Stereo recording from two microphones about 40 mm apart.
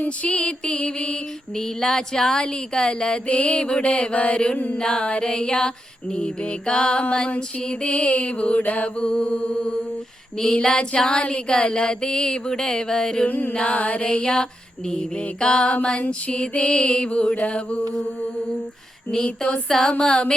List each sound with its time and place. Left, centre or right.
0.0 s music: left
1.5 s speech: centre
3.2 s music: left
4.5 s mantra: left
4.8 s music: left
8.6 s mantra: left
9.0 s music: left
13.2 s mantra: left
13.5 s music: left
17.3 s mantra: left
19.1 s music: left
19.6 s speech: centre
20.0 s music: left